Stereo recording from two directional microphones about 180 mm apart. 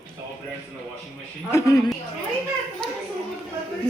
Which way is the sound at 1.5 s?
15° left (ahead or behind).